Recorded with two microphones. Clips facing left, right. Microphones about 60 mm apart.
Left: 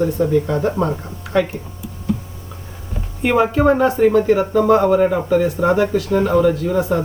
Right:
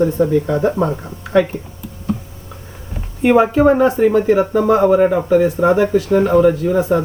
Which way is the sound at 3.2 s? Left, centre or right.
Centre.